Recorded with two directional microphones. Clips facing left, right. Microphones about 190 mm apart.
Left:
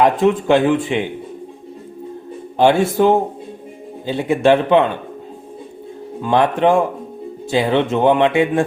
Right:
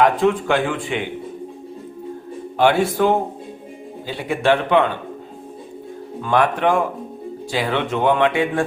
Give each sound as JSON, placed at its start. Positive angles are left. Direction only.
{"t": 0.0, "sound": "speech", "side_deg": 20}
{"t": 2.6, "sound": "speech", "side_deg": 25}
{"t": 6.2, "sound": "speech", "side_deg": 20}